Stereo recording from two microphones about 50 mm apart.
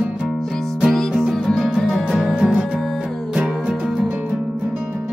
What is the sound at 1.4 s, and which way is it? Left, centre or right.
Music, centre.